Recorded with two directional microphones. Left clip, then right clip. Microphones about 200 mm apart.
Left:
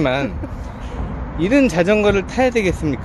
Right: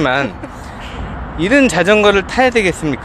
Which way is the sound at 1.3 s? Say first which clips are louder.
Right 4 dB; 5° right (ahead or behind).